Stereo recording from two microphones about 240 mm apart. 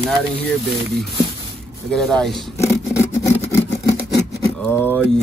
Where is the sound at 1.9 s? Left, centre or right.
Centre.